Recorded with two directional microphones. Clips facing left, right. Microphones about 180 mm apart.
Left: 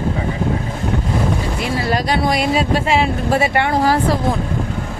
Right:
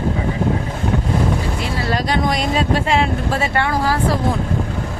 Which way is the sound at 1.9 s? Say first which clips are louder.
Left 1 dB; 10° left (ahead or behind).